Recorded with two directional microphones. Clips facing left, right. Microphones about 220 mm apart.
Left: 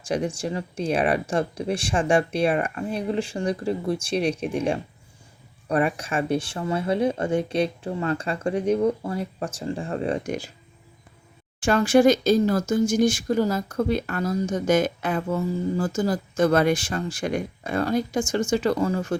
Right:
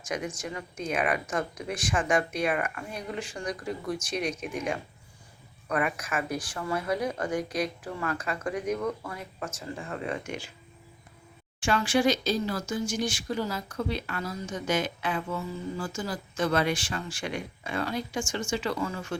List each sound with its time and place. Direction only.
0.0 s speech: 30° left (ahead or behind)
11.6 s speech: 45° left (ahead or behind)